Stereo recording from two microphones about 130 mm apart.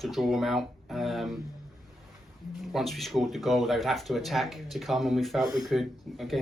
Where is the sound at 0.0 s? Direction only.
Centre (ahead or behind).